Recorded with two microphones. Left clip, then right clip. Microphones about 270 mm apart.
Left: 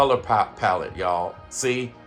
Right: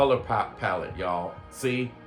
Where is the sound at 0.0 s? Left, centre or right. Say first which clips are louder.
Left 4 dB; left.